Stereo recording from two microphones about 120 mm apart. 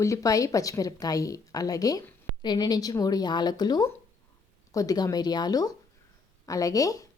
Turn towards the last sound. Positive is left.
turn(degrees=30)  # may be behind; listen again after turning